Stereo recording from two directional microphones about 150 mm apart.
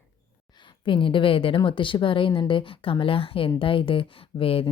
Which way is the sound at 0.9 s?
35° left (ahead or behind).